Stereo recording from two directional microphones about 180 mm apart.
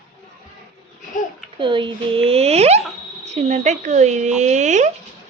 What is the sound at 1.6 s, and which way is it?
Speech, 25° right (ahead or behind).